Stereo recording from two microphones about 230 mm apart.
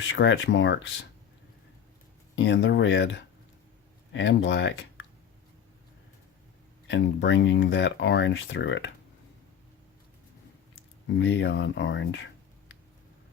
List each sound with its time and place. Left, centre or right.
0.0 s speech: left
2.3 s speech: left
6.8 s speech: left
11.2 s speech: left